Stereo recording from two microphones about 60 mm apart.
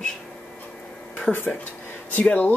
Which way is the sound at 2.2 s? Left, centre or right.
Left.